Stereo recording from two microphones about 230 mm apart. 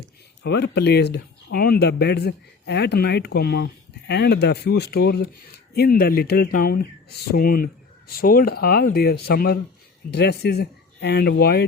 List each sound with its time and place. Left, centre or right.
0.4 s speech: left